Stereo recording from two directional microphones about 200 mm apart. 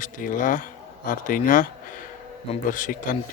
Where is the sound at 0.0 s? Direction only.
40° left (ahead or behind).